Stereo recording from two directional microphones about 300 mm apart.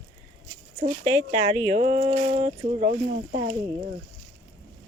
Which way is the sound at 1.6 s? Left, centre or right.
Right.